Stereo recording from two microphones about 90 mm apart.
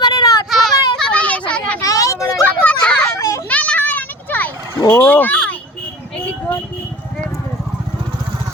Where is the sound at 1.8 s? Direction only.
40° left (ahead or behind).